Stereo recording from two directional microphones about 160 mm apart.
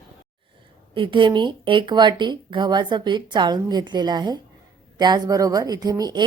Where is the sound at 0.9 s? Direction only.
30° right (ahead or behind).